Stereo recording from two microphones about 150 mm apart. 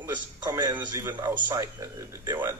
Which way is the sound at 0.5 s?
30° right (ahead or behind).